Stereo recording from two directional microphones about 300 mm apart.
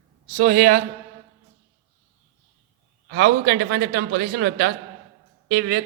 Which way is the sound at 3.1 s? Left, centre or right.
Right.